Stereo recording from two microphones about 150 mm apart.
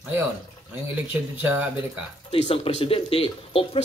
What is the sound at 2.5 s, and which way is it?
Speech, 40° left (ahead or behind).